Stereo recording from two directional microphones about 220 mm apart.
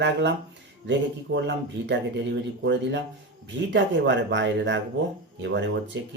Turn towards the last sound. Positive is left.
turn(degrees=-50)  # may be behind; listen again after turning